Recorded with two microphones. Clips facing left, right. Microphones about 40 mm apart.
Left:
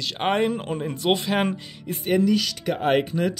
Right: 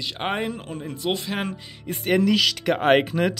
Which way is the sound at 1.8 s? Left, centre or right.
Right.